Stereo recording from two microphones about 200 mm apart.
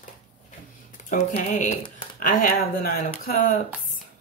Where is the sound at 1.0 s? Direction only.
35° left (ahead or behind).